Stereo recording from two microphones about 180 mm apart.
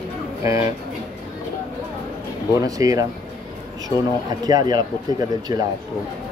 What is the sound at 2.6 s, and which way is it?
Speech, 20° right (ahead or behind).